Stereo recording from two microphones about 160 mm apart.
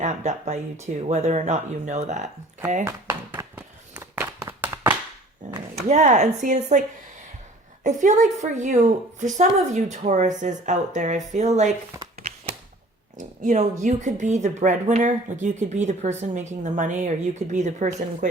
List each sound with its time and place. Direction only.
0.0 s speech: 45° right (ahead or behind)
2.8 s tap: 15° right (ahead or behind)
3.9 s a sound: 10° right (ahead or behind)
5.9 s speech: 45° right (ahead or behind)
7.9 s speech: 50° right (ahead or behind)
13.1 s speech: 50° right (ahead or behind)